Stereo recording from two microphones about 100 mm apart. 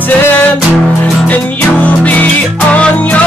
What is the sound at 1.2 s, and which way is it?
Music, 15° left (ahead or behind).